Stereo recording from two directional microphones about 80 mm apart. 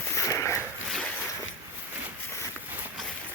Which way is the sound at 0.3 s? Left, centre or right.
Left.